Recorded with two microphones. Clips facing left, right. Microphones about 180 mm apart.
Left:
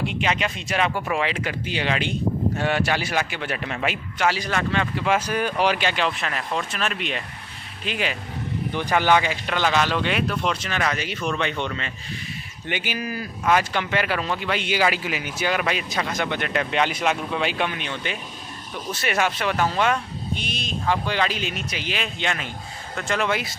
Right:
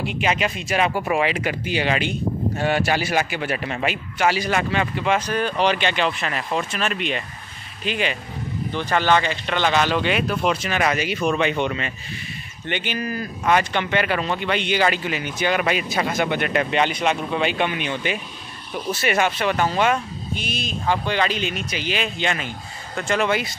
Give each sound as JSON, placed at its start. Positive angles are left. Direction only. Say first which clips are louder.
{"t": 0.0, "sound": "speech", "louder": "right 2 dB", "side_deg": -5}
{"t": 8.7, "sound": "speech", "louder": "even", "side_deg": 15}
{"t": 12.6, "sound": "speech", "louder": "right 2 dB", "side_deg": 10}